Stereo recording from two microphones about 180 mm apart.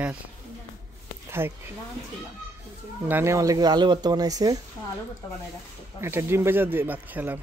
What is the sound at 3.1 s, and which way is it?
Speech, 15° right (ahead or behind).